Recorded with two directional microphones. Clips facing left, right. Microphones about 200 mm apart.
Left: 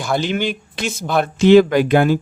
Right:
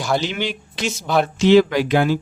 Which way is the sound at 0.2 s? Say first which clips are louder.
Left 4 dB; 50° left (ahead or behind).